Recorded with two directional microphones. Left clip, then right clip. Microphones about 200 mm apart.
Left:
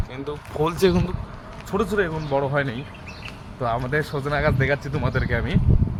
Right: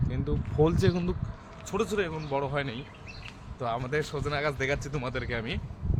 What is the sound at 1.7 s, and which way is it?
Speech, 5° right (ahead or behind).